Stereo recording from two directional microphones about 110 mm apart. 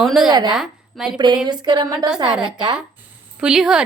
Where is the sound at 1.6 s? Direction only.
40° right (ahead or behind).